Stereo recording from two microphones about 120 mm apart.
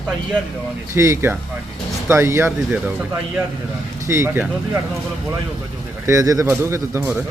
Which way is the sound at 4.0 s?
25° right (ahead or behind).